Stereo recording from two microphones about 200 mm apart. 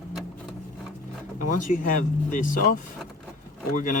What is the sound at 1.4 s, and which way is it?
Speech, 40° left (ahead or behind).